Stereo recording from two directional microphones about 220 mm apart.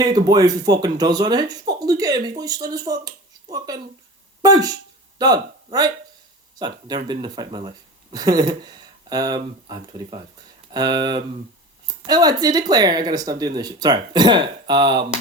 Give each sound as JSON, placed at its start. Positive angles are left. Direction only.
{"t": 0.0, "sound": "speech", "side_deg": -20}